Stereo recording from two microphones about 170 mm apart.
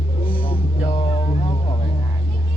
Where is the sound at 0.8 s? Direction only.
30° left (ahead or behind).